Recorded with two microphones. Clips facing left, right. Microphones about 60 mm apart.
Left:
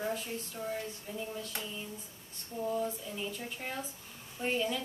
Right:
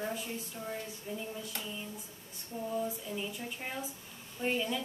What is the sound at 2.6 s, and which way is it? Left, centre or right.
A woman's voice, centre.